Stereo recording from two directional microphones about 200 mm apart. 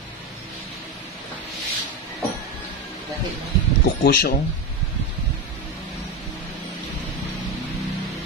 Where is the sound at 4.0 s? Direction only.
50° left (ahead or behind).